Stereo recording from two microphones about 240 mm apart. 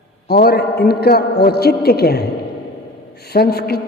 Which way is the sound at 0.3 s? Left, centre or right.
Left.